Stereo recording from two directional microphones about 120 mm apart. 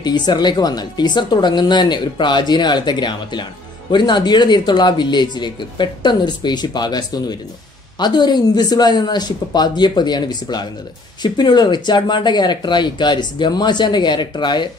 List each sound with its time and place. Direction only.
0.0 s speech: 40° left (ahead or behind)